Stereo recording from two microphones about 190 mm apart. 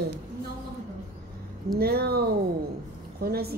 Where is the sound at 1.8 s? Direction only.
55° right (ahead or behind).